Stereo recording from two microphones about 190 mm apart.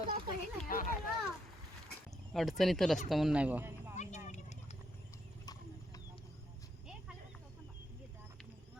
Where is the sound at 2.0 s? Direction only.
Centre (ahead or behind).